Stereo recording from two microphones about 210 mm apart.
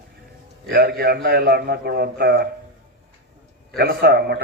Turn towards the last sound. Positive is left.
turn(degrees=-50)  # may be behind; listen again after turning